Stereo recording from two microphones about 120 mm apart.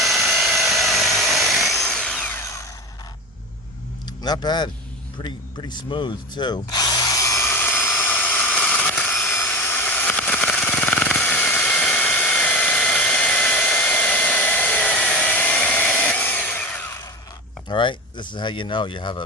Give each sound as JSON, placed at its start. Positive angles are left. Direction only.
{"t": 0.0, "sound": "helicopter", "side_deg": 0}
{"t": 2.4, "sound": "tools", "side_deg": 25}
{"t": 4.2, "sound": "speech", "side_deg": 35}
{"t": 5.2, "sound": "tools", "side_deg": 40}
{"t": 9.2, "sound": "a sound", "side_deg": 20}
{"t": 17.7, "sound": "speech", "side_deg": 40}